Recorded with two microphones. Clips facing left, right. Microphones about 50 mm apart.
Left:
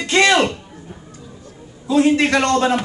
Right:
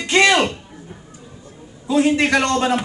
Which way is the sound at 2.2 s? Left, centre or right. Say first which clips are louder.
Left 1 dB; centre.